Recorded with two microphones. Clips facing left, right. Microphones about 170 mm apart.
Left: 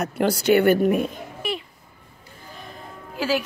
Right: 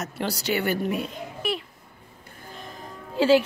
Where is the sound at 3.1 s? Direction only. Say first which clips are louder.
Right 6 dB; 25° right (ahead or behind).